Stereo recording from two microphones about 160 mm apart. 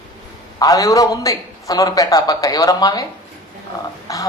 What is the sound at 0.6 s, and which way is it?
A man's voice, 20° left (ahead or behind).